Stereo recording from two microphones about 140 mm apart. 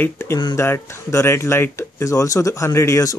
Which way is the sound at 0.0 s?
20° left (ahead or behind).